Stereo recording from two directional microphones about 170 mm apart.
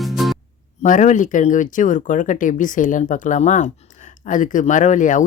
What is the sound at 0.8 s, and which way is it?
Speech, 45° left (ahead or behind).